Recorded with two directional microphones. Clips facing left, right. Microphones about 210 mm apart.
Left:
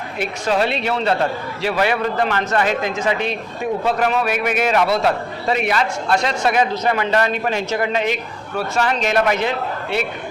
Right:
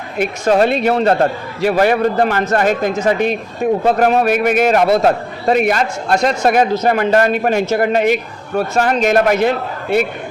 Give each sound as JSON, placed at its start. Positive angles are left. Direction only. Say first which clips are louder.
{"t": 0.2, "sound": "a man's voice", "louder": "right 6 dB", "side_deg": -45}